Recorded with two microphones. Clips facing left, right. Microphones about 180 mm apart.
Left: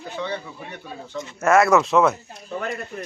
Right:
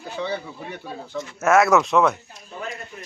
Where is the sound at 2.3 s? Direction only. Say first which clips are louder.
Left 5 dB; 60° left (ahead or behind).